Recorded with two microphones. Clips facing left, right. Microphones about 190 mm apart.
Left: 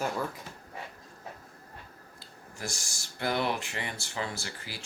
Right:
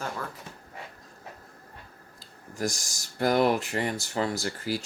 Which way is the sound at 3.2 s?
40° right (ahead or behind).